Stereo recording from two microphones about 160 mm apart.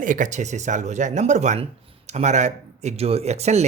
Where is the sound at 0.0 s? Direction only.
55° right (ahead or behind).